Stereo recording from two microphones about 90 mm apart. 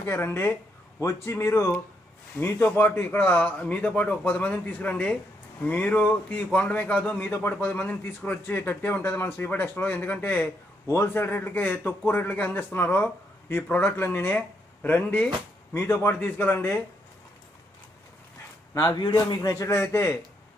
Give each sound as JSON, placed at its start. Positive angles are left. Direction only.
{"t": 0.0, "sound": "a man's voice", "side_deg": 25}
{"t": 15.7, "sound": "speech", "side_deg": 30}
{"t": 18.7, "sound": "a man's voice", "side_deg": 40}